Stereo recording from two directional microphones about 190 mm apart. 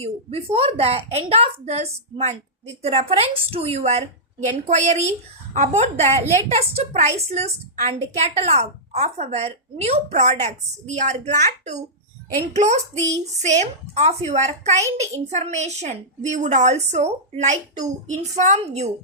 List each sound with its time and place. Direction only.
0.0 s a woman's voice: 30° right (ahead or behind)
13.0 s a sound: 15° right (ahead or behind)
13.4 s a woman's voice: 40° right (ahead or behind)